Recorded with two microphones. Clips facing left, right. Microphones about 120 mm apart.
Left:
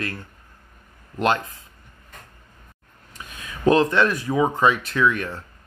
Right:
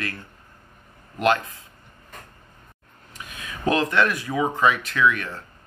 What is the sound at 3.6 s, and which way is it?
Speech, 30° left (ahead or behind).